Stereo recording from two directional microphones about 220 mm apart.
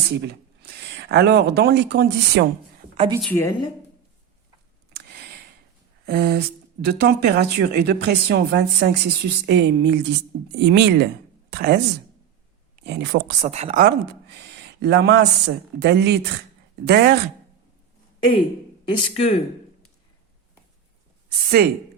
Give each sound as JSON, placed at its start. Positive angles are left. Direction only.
{"t": 0.1, "sound": "speech", "side_deg": -50}
{"t": 3.2, "sound": "a woman's voice", "side_deg": 10}
{"t": 6.1, "sound": "speech", "side_deg": -45}
{"t": 12.8, "sound": "speech", "side_deg": -50}
{"t": 18.9, "sound": "speech", "side_deg": 25}
{"t": 21.6, "sound": "speech", "side_deg": -45}